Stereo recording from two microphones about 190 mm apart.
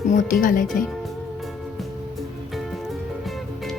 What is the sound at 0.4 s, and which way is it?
Speech, 45° left (ahead or behind).